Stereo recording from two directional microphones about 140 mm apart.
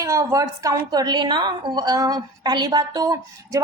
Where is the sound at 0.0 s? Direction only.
20° right (ahead or behind).